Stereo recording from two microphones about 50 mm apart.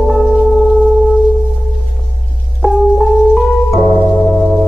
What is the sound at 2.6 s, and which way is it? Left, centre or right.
Music, centre.